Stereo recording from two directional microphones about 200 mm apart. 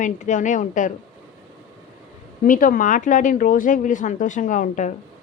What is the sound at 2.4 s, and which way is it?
A woman's voice, 40° left (ahead or behind).